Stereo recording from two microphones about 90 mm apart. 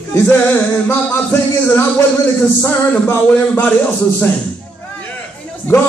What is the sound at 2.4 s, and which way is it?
Music, 20° left (ahead or behind).